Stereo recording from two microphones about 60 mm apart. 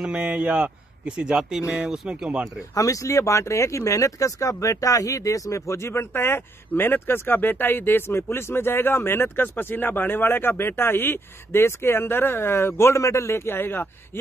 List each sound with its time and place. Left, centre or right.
0.1 s speech: right
2.7 s speech: left